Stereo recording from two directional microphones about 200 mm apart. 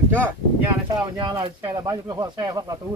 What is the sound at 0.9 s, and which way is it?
Speech, 20° right (ahead or behind).